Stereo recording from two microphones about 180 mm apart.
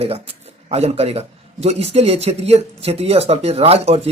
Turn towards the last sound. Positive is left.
turn(degrees=-35)  # may be behind; listen again after turning